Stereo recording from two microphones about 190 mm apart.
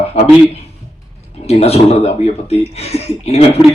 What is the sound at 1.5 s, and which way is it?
Speech, 35° left (ahead or behind).